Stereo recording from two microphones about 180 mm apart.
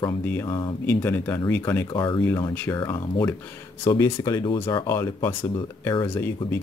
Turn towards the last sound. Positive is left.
turn(degrees=15)  # may be behind; listen again after turning